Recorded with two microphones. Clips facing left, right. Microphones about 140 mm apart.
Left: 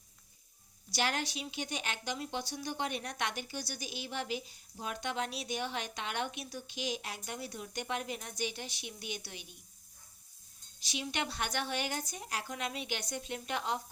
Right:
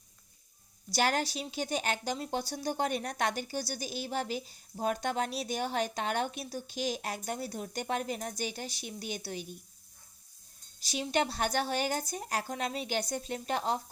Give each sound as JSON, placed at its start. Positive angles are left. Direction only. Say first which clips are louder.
{"t": 0.9, "sound": "speech", "louder": "right 5 dB", "side_deg": -40}
{"t": 10.8, "sound": "speech", "louder": "right 7 dB", "side_deg": -40}